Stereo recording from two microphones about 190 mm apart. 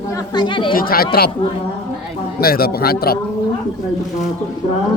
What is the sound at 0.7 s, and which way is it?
Speech, 50° left (ahead or behind).